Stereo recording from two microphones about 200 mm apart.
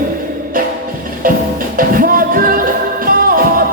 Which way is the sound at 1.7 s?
45° right (ahead or behind).